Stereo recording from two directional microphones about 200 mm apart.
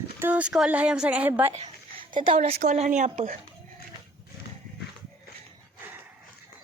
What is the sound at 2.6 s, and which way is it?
Speech, 35° right (ahead or behind).